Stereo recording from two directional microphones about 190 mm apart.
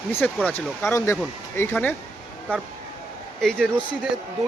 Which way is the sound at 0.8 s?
15° left (ahead or behind).